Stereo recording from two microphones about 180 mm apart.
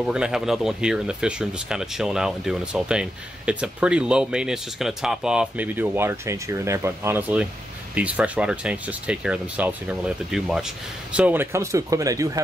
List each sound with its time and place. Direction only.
0.0 s speech: 5° right (ahead or behind)